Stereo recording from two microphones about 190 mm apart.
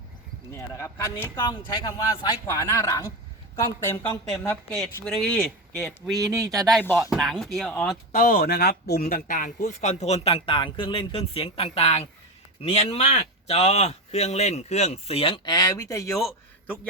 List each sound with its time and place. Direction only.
0.5 s speech: 15° left (ahead or behind)
4.3 s speech: 5° left (ahead or behind)
6.3 s speech: 20° right (ahead or behind)
6.7 s speech: centre (ahead or behind)
8.1 s speech: 50° left (ahead or behind); by 16.2 s 15° left (ahead or behind)